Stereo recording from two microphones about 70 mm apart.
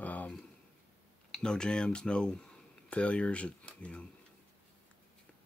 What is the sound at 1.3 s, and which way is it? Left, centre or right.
Speech, centre.